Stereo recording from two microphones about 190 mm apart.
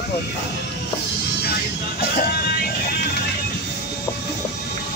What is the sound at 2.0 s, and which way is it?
Music, 55° left (ahead or behind).